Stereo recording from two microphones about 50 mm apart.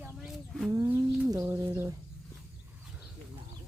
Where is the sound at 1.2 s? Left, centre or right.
Right.